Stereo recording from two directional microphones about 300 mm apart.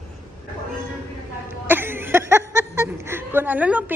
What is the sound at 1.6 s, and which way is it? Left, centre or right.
A woman's voice, centre.